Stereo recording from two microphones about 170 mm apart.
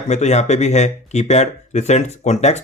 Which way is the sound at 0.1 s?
40° left (ahead or behind).